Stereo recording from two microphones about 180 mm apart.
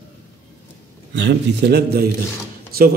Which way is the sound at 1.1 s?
75° right (ahead or behind).